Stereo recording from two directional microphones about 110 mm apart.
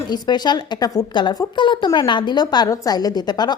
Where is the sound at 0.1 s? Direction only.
40° left (ahead or behind).